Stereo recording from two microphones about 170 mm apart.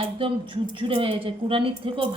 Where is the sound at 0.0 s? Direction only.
30° right (ahead or behind).